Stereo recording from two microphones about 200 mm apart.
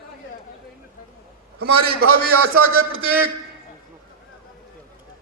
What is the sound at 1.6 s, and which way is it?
A man's voice, 50° right (ahead or behind).